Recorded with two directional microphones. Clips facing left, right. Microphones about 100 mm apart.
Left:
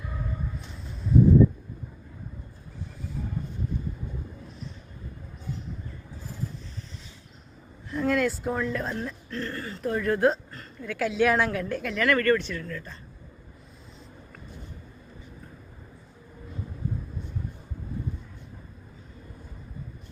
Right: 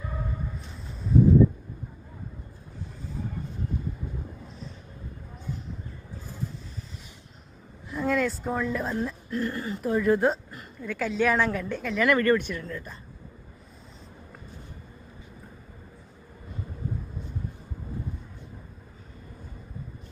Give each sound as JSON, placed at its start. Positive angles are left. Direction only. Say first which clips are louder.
{"t": 7.9, "sound": "a woman's voice", "louder": "left 1 dB", "side_deg": 0}
{"t": 9.8, "sound": "a woman's voice", "louder": "right 1 dB", "side_deg": -5}
{"t": 12.0, "sound": "speech", "louder": "right 1 dB", "side_deg": -15}